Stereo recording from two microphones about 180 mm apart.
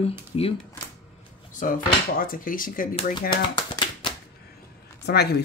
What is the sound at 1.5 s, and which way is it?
Speech, 45° left (ahead or behind).